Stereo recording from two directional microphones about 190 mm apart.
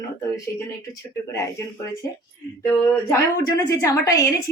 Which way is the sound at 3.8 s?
15° left (ahead or behind).